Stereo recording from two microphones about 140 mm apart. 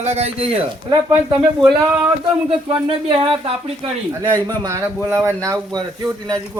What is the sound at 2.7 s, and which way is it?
Speech, 35° right (ahead or behind).